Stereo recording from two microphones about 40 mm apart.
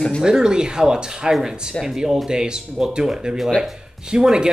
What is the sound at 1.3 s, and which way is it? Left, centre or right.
Speech, centre.